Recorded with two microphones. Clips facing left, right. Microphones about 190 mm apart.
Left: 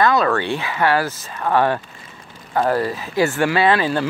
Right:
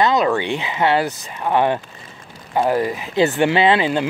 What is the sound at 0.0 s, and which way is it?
Speech, 20° right (ahead or behind).